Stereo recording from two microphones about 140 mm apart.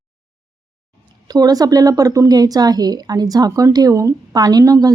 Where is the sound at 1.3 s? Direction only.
30° right (ahead or behind).